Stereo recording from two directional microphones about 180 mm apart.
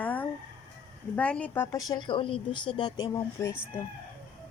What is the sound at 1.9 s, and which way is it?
Speech, 25° left (ahead or behind).